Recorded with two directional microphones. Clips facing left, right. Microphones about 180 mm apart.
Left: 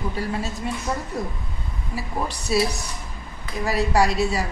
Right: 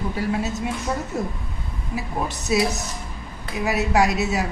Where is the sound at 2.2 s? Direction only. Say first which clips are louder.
Right 1 dB; 20° right (ahead or behind).